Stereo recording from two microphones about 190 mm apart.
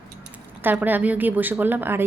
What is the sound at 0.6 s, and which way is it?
A woman's voice, 10° right (ahead or behind).